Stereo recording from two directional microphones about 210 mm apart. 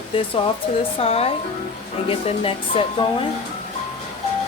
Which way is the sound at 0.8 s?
25° left (ahead or behind).